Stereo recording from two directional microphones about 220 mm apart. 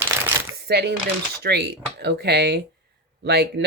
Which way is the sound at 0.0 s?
10° right (ahead or behind).